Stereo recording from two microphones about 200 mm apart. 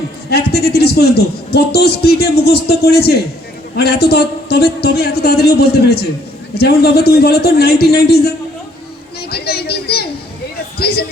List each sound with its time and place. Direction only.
0.3 s speech: 55° left (ahead or behind)
9.3 s speech: 50° left (ahead or behind)